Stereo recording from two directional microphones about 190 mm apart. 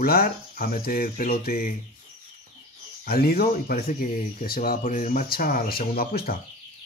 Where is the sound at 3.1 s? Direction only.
55° left (ahead or behind).